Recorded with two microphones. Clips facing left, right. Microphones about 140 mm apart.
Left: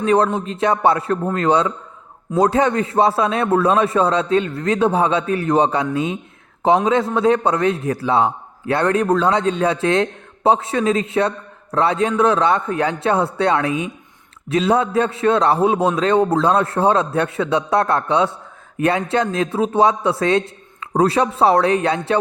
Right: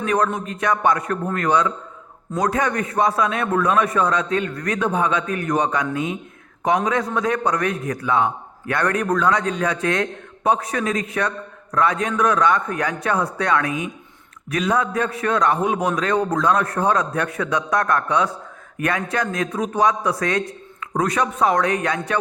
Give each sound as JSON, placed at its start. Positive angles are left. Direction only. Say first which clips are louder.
{"t": 0.0, "sound": "a man's voice", "louder": "left 5 dB", "side_deg": 30}